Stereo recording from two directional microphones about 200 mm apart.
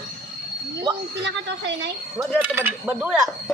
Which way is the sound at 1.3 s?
60° right (ahead or behind).